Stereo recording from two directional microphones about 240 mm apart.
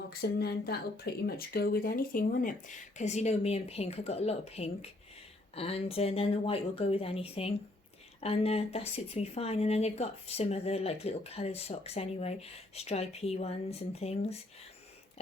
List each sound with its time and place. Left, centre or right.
0.1 s speech: left